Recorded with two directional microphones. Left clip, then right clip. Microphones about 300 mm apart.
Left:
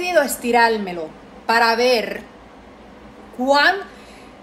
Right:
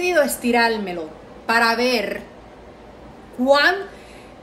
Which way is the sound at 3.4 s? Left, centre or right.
Centre.